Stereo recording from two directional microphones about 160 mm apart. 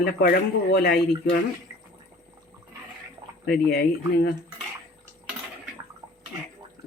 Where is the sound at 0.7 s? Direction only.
80° left.